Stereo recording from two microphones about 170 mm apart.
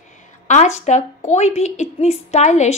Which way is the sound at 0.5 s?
40° left (ahead or behind).